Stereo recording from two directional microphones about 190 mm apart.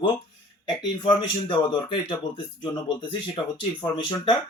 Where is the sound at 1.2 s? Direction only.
25° left (ahead or behind).